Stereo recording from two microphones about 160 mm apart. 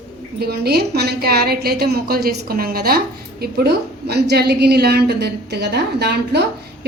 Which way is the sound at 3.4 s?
85° right.